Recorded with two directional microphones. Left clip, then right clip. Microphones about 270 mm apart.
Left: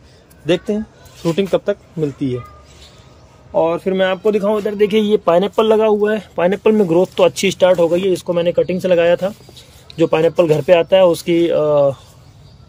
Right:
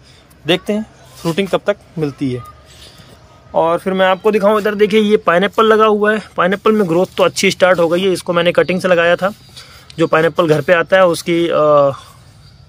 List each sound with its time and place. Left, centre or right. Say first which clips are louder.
0.5 s speech: right 2 dB; centre
3.5 s speech: right 2 dB; centre
5.4 s speech: right 3 dB; right
5.8 s speech: right 2 dB; centre